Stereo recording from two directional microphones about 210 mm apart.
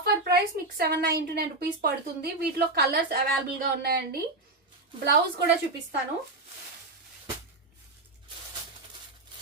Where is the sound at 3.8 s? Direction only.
50° right (ahead or behind).